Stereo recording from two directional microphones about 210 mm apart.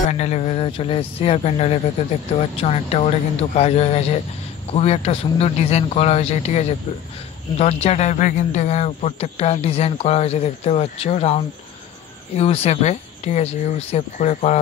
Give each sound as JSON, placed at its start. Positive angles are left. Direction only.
{"t": 0.1, "sound": "speech", "side_deg": 35}